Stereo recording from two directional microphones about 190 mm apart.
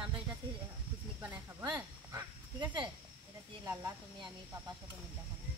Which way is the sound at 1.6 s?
20° right (ahead or behind).